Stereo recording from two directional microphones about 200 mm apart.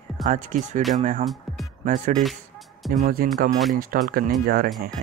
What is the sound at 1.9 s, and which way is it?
Speech, 40° right (ahead or behind).